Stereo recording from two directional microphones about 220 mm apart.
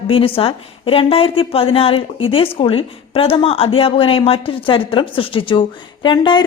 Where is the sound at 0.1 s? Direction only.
25° left (ahead or behind).